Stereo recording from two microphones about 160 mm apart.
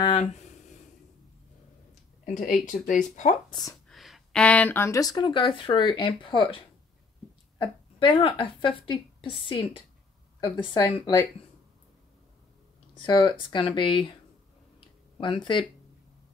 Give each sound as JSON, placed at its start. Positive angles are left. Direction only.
{"t": 0.0, "sound": "a sound", "side_deg": 40}
{"t": 2.2, "sound": "speech", "side_deg": 55}
{"t": 3.9, "sound": "a woman's voice", "side_deg": 0}
{"t": 12.9, "sound": "speech", "side_deg": 30}
{"t": 15.1, "sound": "speech", "side_deg": 30}